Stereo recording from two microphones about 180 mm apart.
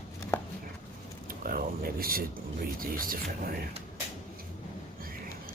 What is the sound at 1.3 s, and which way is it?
Speech, 55° right (ahead or behind).